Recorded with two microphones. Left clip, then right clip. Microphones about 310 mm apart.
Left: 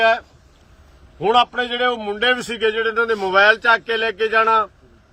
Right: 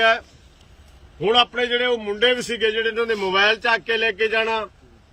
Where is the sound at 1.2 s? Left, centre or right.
Centre.